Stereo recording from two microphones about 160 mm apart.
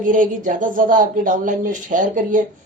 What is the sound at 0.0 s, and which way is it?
Speech, 55° right (ahead or behind).